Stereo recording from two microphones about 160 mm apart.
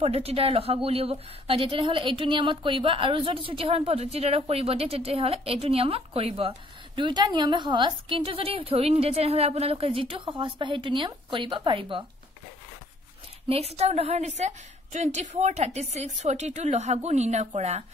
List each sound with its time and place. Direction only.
0.0 s a woman's voice: 40° right (ahead or behind)
13.5 s a woman's voice: 40° right (ahead or behind)